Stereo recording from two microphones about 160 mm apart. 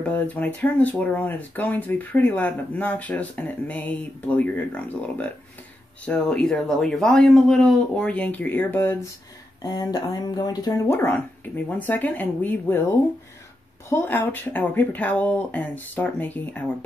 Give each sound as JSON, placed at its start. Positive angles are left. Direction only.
{"t": 0.0, "sound": "speech", "side_deg": 10}
{"t": 9.6, "sound": "speech", "side_deg": 25}
{"t": 13.8, "sound": "speech", "side_deg": 15}